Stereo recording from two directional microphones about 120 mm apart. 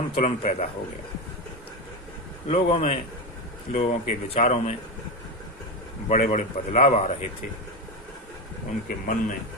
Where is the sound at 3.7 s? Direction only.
85° left.